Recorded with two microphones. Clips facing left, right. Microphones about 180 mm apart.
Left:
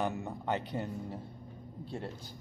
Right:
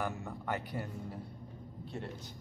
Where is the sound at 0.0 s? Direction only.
20° left (ahead or behind).